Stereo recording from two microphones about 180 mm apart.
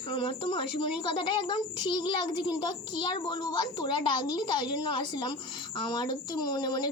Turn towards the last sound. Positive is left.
turn(degrees=20)  # may be behind; listen again after turning